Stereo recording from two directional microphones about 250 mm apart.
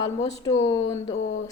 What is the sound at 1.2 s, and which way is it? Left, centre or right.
Speech, left.